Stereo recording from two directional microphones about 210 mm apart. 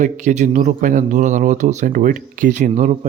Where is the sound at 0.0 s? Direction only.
35° right (ahead or behind).